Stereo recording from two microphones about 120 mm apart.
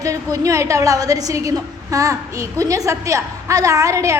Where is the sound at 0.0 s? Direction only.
30° right (ahead or behind).